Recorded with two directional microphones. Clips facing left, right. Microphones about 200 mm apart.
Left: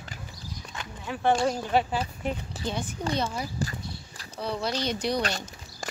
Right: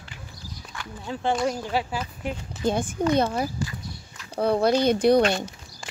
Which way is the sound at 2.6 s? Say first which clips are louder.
Right 8 dB; 50° right (ahead or behind).